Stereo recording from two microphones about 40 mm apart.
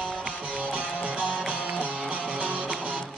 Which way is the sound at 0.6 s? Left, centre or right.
Right.